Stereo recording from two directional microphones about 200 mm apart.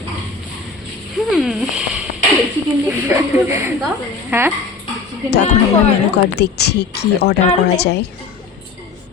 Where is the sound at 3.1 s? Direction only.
10° right (ahead or behind).